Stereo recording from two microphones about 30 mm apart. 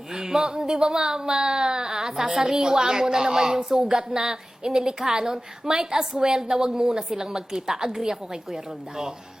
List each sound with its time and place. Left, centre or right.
0.1 s speech: centre